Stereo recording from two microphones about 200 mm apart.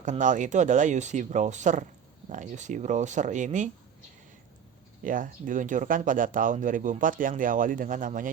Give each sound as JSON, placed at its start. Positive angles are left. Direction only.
{"t": 0.0, "sound": "speech", "side_deg": -40}
{"t": 5.0, "sound": "speech", "side_deg": -40}